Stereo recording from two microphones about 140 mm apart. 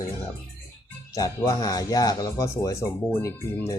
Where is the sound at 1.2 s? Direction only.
25° left (ahead or behind).